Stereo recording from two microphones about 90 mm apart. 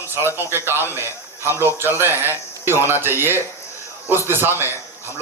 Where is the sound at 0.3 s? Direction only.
25° right (ahead or behind).